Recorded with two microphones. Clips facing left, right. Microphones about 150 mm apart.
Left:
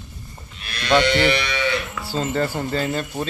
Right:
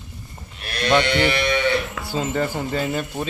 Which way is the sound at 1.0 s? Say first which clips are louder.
Left 1 dB; 50° right (ahead or behind).